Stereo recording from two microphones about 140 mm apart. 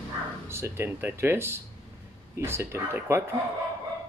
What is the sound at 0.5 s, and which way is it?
Speech, 15° right (ahead or behind).